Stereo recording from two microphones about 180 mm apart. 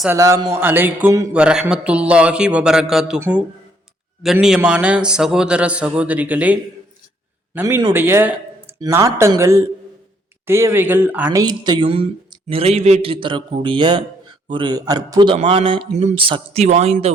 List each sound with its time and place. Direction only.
0.1 s a man's voice: 20° right (ahead or behind); by 17.1 s 35° right (ahead or behind)